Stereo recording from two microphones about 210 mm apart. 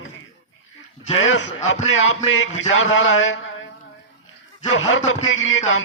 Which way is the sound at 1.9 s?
70° left (ahead or behind).